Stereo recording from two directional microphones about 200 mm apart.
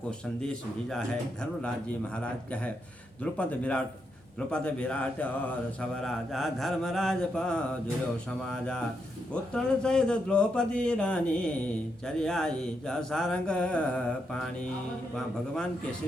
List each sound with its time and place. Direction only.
0.4 s speech: 5° left (ahead or behind)
3.3 s speech: 5° left (ahead or behind)